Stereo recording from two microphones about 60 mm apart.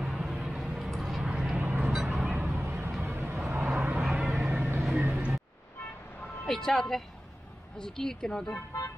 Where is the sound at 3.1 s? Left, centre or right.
Right.